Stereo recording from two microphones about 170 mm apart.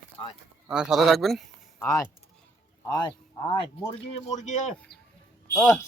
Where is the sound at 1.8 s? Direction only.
15° left (ahead or behind).